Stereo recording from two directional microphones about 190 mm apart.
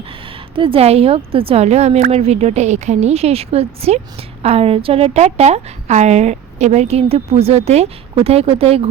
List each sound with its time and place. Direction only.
0.3 s a woman's voice: 25° right (ahead or behind)